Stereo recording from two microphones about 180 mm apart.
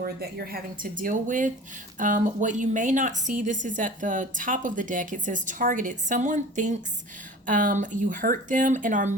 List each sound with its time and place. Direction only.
0.0 s a woman's voice: 55° right (ahead or behind)